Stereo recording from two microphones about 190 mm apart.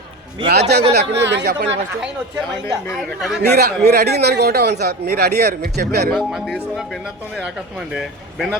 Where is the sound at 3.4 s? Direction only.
55° right (ahead or behind).